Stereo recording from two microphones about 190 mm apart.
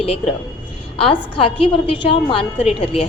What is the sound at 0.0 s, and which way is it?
A woman's voice, 30° left (ahead or behind).